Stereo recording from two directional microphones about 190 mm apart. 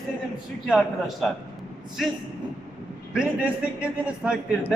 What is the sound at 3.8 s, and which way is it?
Speech, 5° right (ahead or behind).